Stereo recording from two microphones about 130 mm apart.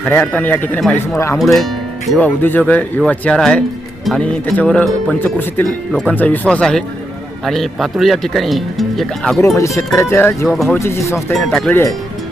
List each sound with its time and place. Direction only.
0.0 s speech: 10° left (ahead or behind)
1.4 s speech: centre (ahead or behind)
2.1 s speech: 15° left (ahead or behind)
9.6 s speech: 25° left (ahead or behind)
11.3 s speech: centre (ahead or behind)